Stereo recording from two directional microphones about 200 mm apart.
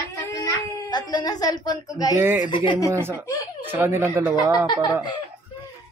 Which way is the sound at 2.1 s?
10° right (ahead or behind).